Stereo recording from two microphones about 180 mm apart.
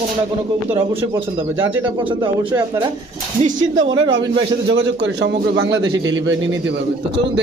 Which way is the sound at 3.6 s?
90° right.